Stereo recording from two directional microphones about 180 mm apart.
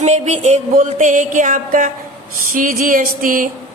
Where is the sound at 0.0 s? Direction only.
40° right (ahead or behind).